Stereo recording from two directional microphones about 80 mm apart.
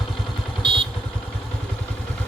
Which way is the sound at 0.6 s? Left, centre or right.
Right.